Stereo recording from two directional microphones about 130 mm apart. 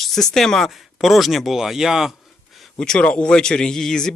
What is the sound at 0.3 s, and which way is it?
Speech, 5° left (ahead or behind).